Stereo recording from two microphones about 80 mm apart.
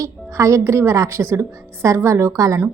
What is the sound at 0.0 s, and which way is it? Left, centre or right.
A woman's voice, right.